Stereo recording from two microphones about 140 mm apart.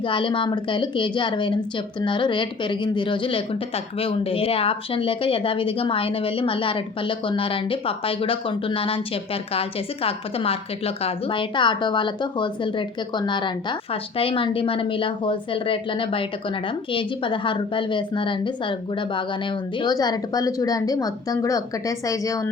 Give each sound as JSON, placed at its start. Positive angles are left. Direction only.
{"t": 0.0, "sound": "a woman's voice", "side_deg": 35}